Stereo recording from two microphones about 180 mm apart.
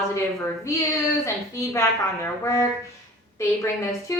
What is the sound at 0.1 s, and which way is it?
A woman's voice, 15° left (ahead or behind).